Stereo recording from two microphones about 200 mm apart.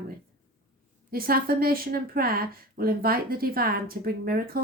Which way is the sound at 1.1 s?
45° right (ahead or behind).